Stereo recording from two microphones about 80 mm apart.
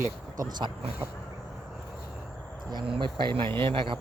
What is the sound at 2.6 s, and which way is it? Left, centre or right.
Speech, right.